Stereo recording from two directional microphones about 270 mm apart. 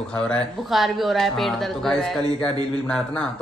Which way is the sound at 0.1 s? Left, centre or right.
Centre.